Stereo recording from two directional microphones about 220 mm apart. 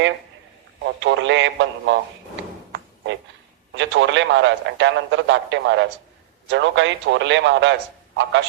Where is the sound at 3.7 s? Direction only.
55° right (ahead or behind).